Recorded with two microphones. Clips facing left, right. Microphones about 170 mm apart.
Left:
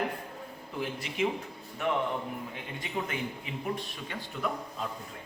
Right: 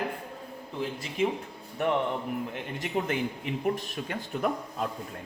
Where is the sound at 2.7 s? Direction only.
65° right (ahead or behind).